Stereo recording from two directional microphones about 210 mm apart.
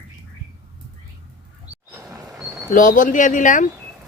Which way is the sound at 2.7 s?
40° left (ahead or behind).